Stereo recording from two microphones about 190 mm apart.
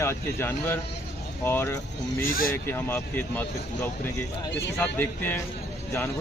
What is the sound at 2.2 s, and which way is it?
Speech, 50° left (ahead or behind).